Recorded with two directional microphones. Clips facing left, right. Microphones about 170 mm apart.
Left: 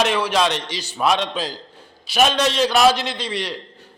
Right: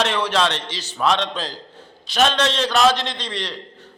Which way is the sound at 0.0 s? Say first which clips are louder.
Left 1 dB; 10° left (ahead or behind).